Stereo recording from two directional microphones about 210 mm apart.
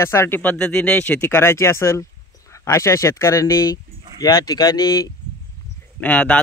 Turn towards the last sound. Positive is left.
turn(degrees=5)  # may be behind; listen again after turning